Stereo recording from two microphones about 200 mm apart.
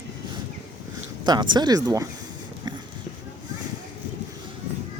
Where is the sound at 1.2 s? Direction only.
20° right (ahead or behind).